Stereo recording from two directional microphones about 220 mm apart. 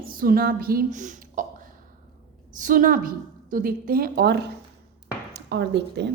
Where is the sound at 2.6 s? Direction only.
35° right (ahead or behind).